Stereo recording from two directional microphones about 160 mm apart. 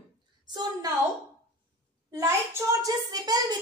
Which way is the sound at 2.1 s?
20° right (ahead or behind).